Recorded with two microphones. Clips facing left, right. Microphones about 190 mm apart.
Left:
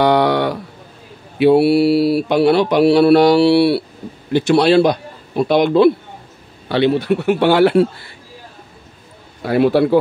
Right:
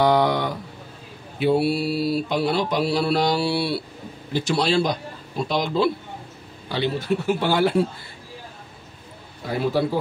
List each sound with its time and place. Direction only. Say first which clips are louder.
0.0 s a sound: left 5 dB; 70° left (ahead or behind)
1.4 s mantra: left 9 dB; 70° left (ahead or behind)
4.3 s a man's voice: left 9 dB; 65° left (ahead or behind)
6.7 s mantra: left 8 dB; 65° left (ahead or behind)
9.4 s mantra: left 9 dB; 70° left (ahead or behind)